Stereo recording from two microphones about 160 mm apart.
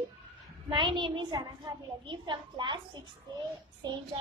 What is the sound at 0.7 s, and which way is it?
A child's voice, 30° right (ahead or behind).